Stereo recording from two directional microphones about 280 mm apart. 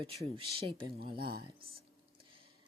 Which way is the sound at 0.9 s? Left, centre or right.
Right.